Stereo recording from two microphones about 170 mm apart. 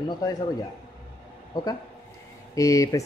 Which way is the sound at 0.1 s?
20° left (ahead or behind).